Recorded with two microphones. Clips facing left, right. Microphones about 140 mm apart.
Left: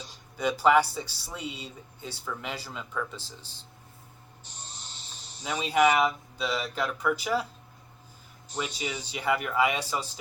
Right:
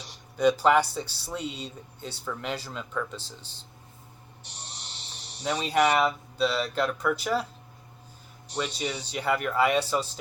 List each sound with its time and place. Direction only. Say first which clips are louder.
0.3 s speech: right 2 dB; 10° left (ahead or behind)
4.4 s a sound: right 2 dB; 70° right (ahead or behind)
5.9 s speech: right 1 dB; 10° left (ahead or behind)
8.6 s speech: right 2 dB; 10° left (ahead or behind)